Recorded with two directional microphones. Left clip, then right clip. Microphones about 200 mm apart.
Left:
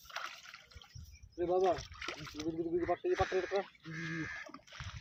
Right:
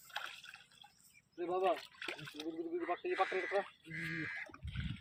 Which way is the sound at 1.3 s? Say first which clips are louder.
Left 4 dB; 50° left (ahead or behind).